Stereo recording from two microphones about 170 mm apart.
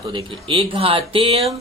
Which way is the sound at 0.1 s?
30° right (ahead or behind).